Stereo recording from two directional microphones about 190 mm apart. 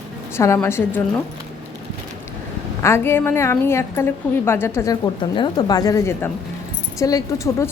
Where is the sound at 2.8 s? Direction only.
10° left (ahead or behind).